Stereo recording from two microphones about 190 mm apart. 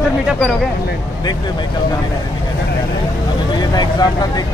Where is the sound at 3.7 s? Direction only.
20° left (ahead or behind).